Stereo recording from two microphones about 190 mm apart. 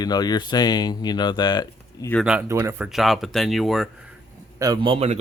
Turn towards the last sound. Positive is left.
turn(degrees=-30)  # may be behind; listen again after turning